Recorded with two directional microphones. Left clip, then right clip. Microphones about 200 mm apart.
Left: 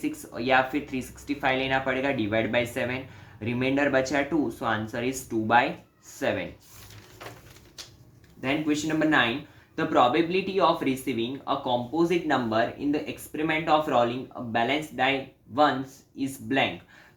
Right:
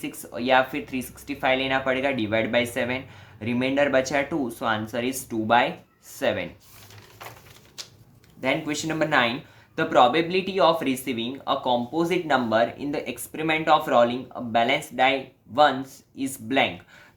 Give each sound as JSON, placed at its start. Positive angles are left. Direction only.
{"t": 0.0, "sound": "speech", "side_deg": -35}
{"t": 8.4, "sound": "speech", "side_deg": -40}
{"t": 16.1, "sound": "speech", "side_deg": -40}